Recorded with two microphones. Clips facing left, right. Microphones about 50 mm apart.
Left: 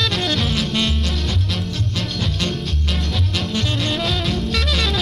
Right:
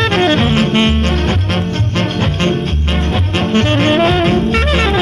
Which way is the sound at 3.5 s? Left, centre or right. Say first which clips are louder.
Right 12 dB; right.